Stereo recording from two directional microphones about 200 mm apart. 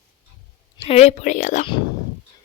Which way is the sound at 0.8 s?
30° left (ahead or behind).